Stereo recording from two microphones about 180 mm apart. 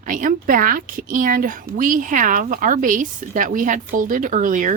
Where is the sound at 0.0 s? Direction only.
45° right (ahead or behind).